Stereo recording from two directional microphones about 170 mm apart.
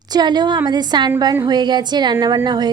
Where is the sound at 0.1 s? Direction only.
25° right (ahead or behind).